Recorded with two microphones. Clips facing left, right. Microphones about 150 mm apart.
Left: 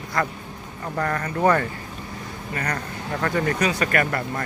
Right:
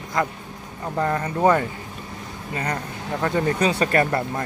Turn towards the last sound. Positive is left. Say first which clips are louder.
# right 3 dB
turn(degrees=-25)  # may be behind; listen again after turning